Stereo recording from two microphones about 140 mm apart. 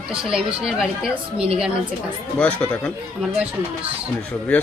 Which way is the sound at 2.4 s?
10° left (ahead or behind).